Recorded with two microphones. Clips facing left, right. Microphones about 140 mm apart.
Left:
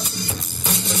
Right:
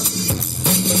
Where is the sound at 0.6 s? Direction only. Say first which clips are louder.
Right 6 dB; 65° right (ahead or behind).